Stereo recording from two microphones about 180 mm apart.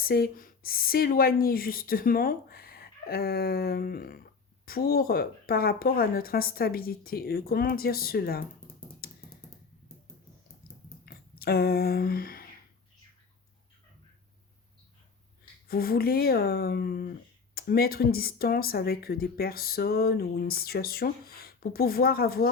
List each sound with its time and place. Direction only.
0.0 s speech: 55° left (ahead or behind)
9.0 s music: 55° left (ahead or behind)
11.0 s a sound: 60° left (ahead or behind)
15.6 s speech: 55° left (ahead or behind)